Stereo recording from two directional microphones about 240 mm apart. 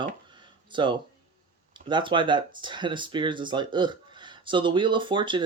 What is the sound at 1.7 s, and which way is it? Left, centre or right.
Speech, centre.